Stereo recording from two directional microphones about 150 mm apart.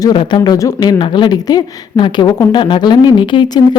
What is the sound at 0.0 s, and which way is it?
Speech, 30° left (ahead or behind).